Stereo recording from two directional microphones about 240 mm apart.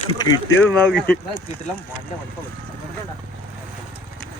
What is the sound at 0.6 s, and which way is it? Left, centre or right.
Speech, centre.